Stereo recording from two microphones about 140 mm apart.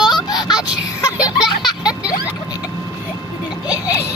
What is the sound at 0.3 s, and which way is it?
Vehicle, 30° left (ahead or behind).